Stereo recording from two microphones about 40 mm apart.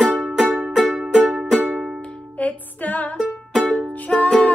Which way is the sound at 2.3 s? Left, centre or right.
Left.